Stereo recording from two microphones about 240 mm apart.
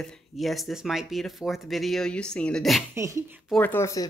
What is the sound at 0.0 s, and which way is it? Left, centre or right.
Speech, centre.